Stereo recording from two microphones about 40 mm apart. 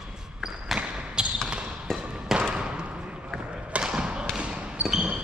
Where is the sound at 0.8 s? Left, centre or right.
Right.